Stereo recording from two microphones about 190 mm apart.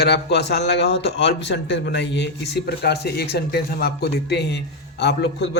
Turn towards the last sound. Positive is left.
turn(degrees=65)  # may be behind; listen again after turning